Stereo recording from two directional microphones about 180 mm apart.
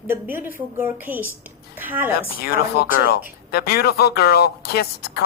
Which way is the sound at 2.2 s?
60° left (ahead or behind).